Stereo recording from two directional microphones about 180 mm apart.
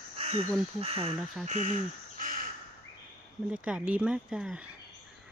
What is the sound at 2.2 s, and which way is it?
Crow, 50° right (ahead or behind).